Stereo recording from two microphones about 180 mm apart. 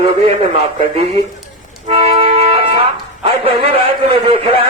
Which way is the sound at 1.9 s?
30° right (ahead or behind).